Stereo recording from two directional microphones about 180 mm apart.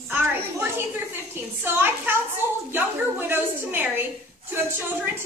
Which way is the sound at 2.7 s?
10° right (ahead or behind).